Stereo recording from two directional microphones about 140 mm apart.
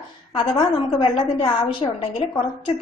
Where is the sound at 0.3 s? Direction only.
35° left (ahead or behind).